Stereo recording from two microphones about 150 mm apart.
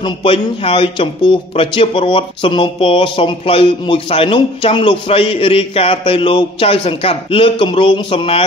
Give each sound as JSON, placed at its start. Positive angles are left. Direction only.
{"t": 0.0, "sound": "speech", "side_deg": 35}